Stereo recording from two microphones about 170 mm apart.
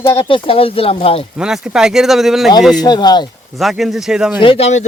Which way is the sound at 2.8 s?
25° left (ahead or behind).